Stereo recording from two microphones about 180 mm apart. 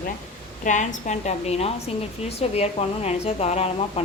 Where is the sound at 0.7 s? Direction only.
40° left (ahead or behind).